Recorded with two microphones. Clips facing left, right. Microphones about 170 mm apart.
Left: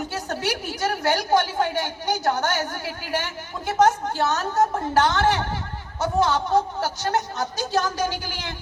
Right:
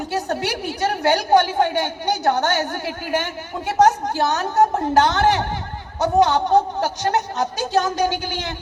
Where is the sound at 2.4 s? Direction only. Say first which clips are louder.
Right 4 dB; 30° right (ahead or behind).